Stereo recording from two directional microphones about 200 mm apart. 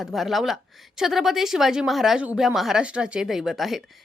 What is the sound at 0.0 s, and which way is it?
A woman's voice, centre (ahead or behind).